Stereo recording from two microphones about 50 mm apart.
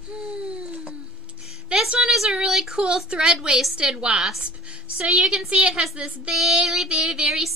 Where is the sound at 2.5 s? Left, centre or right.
Centre.